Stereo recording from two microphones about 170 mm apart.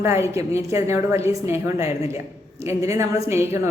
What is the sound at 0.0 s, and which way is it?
A woman's voice, 15° right (ahead or behind).